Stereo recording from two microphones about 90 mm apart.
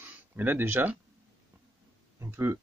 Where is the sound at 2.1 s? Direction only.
25° right (ahead or behind).